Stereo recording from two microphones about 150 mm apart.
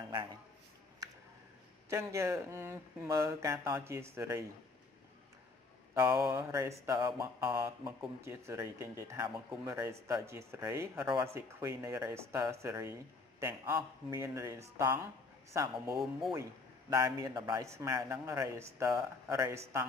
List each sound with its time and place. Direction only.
1.9 s speech: 20° right (ahead or behind)
5.9 s speech: 10° right (ahead or behind)
6.5 s speech: 20° right (ahead or behind)
7.4 s speech: 15° right (ahead or behind)
15.9 s speech: centre (ahead or behind)
16.9 s speech: 25° right (ahead or behind)